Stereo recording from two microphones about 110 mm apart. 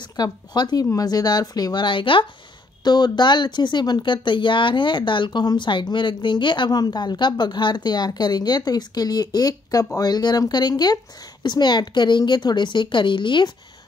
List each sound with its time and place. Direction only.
0.1 s speech: 40° left (ahead or behind)
2.8 s speech: 40° left (ahead or behind)